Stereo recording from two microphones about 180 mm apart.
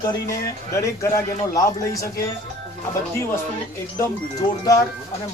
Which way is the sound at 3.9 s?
20° left (ahead or behind).